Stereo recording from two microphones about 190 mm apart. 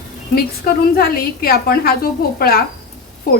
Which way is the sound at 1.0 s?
50° left (ahead or behind).